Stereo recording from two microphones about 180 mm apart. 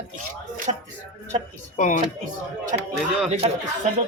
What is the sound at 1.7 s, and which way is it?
Speech, 45° left (ahead or behind).